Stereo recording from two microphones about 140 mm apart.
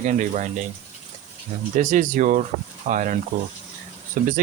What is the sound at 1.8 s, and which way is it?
Speech, 65° right (ahead or behind).